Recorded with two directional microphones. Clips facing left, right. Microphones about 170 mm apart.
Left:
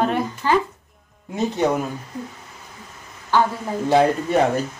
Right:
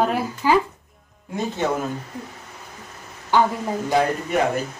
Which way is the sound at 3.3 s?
15° right (ahead or behind).